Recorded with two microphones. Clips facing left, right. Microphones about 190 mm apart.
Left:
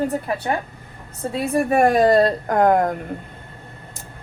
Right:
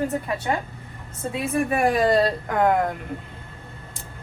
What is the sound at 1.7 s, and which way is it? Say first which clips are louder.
A woman's voice: left 5 dB; 50° left (ahead or behind).